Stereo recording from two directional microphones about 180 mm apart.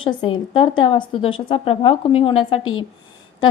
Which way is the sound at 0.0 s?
30° left (ahead or behind).